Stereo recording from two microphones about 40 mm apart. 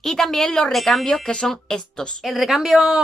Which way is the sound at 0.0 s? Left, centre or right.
Centre.